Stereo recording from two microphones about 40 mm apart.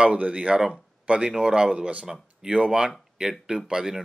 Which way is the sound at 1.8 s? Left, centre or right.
Right.